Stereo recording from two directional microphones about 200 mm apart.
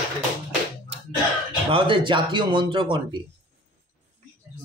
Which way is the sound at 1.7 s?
25° right (ahead or behind).